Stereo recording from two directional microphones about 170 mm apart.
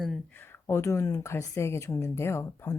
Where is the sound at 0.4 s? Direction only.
15° left (ahead or behind).